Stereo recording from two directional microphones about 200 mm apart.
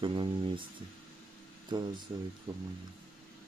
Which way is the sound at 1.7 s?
25° right (ahead or behind).